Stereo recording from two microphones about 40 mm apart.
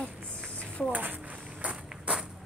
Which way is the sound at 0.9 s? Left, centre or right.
Right.